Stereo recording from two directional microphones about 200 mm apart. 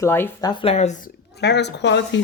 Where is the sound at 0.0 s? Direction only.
15° left (ahead or behind).